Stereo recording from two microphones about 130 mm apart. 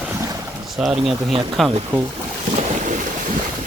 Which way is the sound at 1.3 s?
40° right (ahead or behind).